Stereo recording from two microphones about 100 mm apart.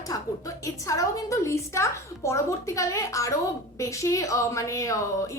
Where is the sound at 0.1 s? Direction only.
35° left (ahead or behind).